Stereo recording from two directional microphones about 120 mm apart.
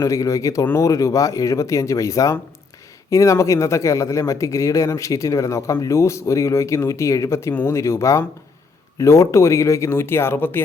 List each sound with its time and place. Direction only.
0.0 s a man's voice: 30° left (ahead or behind)